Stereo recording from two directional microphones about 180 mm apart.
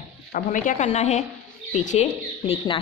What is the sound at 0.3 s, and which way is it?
A woman's voice, 45° left (ahead or behind).